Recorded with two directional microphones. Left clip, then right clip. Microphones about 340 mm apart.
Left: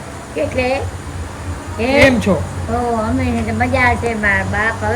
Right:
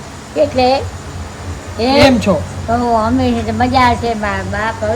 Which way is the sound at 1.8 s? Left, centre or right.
Centre.